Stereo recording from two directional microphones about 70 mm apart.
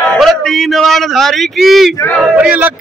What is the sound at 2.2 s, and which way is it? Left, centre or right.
Speech, centre.